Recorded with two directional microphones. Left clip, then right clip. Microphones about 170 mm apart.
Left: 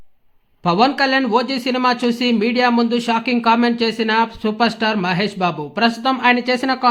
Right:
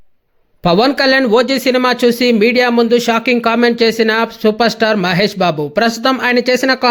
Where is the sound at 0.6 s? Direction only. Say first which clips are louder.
Right 4 dB; 30° right (ahead or behind).